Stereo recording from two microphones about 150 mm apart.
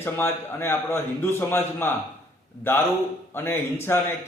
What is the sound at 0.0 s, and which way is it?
A man's voice, 15° left (ahead or behind).